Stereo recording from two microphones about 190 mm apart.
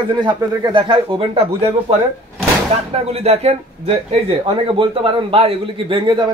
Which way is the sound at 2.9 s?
35° right (ahead or behind).